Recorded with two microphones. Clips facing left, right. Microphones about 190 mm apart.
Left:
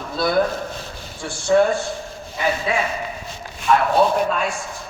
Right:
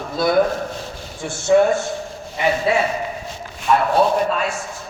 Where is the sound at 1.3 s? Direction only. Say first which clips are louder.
Right 2 dB; 20° right (ahead or behind).